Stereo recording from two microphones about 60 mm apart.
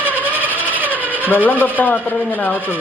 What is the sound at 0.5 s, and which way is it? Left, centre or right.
Filing, right.